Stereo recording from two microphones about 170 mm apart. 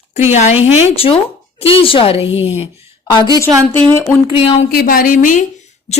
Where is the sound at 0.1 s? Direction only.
40° left (ahead or behind).